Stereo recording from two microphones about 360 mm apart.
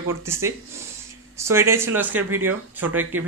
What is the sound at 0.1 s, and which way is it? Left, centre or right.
Speech, centre.